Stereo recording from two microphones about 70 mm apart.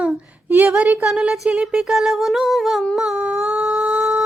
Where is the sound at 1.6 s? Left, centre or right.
Centre.